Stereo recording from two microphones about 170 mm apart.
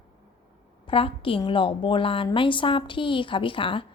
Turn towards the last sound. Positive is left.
turn(degrees=30)  # may be behind; listen again after turning